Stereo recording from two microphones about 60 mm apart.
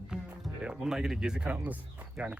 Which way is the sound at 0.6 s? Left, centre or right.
Centre.